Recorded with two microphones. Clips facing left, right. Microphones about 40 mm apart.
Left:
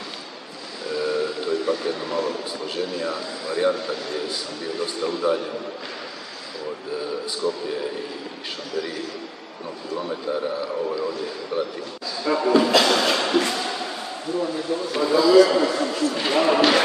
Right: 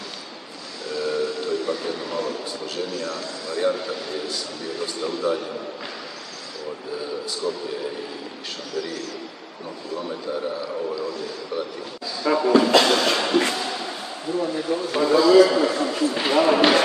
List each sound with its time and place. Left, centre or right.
0.8 s a sound: centre
2.6 s speech: centre
4.7 s speech: centre
7.4 s a man's voice: centre
8.7 s speech: centre
10.3 s speech: centre
11.5 s speech: centre
12.4 s a man's voice: centre
13.5 s thump: centre
14.5 s a man's voice: centre
16.3 s a man's voice: centre